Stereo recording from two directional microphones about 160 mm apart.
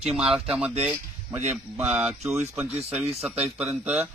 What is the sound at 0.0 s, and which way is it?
Speech, 40° right (ahead or behind).